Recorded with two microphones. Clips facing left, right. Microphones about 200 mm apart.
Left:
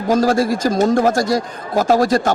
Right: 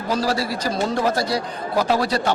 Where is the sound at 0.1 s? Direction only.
45° left (ahead or behind).